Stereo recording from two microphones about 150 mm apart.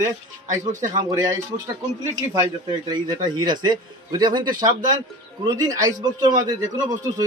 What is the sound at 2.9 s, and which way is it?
A man's voice, 25° right (ahead or behind).